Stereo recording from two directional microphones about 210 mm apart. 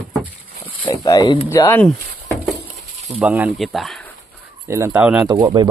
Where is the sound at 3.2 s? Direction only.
5° right (ahead or behind).